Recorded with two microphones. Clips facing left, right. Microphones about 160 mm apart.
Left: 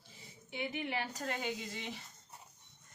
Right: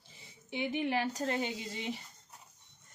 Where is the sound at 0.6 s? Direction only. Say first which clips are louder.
Right 6 dB; 30° right (ahead or behind).